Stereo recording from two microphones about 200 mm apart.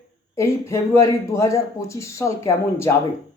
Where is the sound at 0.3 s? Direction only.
15° left (ahead or behind).